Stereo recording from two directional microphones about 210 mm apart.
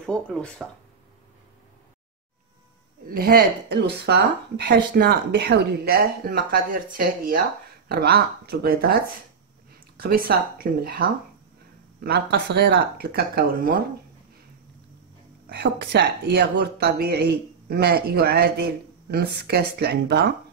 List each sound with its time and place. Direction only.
0.0 s speech: 5° left (ahead or behind)
3.1 s a woman's voice: 40° right (ahead or behind)
15.5 s a woman's voice: 50° right (ahead or behind)